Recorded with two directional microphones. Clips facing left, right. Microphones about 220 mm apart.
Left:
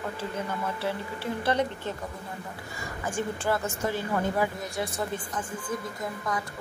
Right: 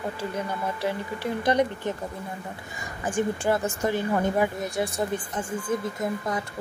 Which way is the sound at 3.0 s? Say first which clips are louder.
Right 4 dB; 15° right (ahead or behind).